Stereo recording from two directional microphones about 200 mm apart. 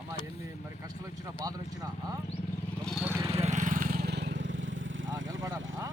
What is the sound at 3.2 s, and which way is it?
Vehicle, 30° right (ahead or behind).